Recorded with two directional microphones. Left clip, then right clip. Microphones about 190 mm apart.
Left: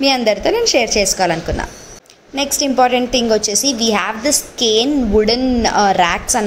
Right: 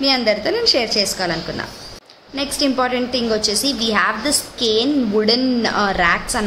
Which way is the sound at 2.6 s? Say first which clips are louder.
Left 5 dB; 20° left (ahead or behind).